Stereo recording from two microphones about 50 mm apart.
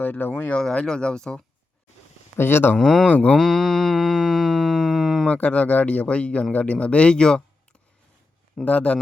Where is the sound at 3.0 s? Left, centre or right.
Left.